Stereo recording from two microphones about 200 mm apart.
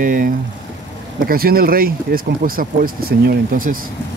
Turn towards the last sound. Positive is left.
turn(degrees=-45)  # may be behind; listen again after turning